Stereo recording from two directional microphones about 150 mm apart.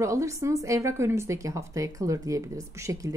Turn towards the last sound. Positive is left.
turn(degrees=-20)  # may be behind; listen again after turning